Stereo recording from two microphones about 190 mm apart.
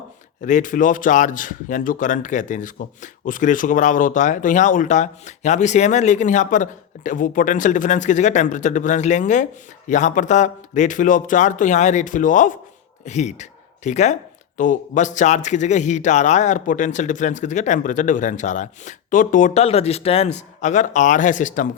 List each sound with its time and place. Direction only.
0.4 s speech: 40° left (ahead or behind)